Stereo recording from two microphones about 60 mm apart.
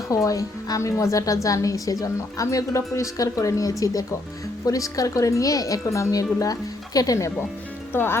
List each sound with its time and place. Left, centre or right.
0.3 s a woman's voice: left
7.9 s speech: left